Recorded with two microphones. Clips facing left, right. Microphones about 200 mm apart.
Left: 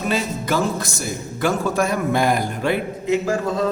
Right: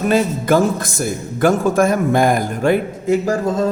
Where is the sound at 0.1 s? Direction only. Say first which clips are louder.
Right 8 dB; 50° right (ahead or behind).